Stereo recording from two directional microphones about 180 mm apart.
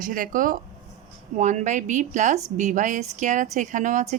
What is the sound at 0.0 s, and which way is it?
A woman's voice, 50° right (ahead or behind).